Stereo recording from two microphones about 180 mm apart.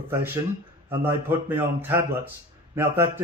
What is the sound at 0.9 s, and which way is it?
Speech, 10° right (ahead or behind).